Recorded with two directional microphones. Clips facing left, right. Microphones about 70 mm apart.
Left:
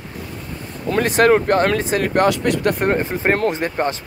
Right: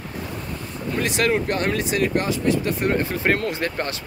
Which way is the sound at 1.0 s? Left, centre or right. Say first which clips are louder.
Left 7 dB; left.